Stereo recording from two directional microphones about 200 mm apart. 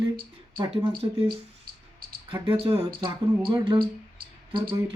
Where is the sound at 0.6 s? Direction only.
30° right (ahead or behind).